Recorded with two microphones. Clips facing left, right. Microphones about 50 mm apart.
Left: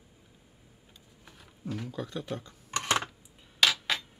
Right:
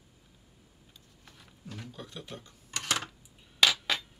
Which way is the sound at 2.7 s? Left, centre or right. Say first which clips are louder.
Left 4 dB; left.